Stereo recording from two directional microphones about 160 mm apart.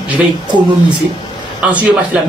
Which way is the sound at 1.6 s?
10° right (ahead or behind).